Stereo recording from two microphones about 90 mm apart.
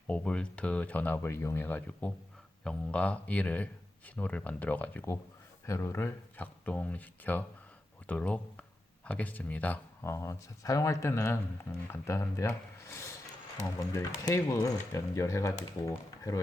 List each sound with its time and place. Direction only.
0.1 s speech: 10° left (ahead or behind)
5.6 s speech: 35° left (ahead or behind)
6.4 s speech: 15° left (ahead or behind)
10.0 s speech: 30° left (ahead or behind)
12.8 s a sound: 30° left (ahead or behind)
13.7 s speech: 40° left (ahead or behind)